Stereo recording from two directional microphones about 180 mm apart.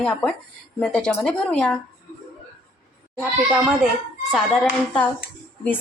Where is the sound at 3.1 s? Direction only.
5° right (ahead or behind).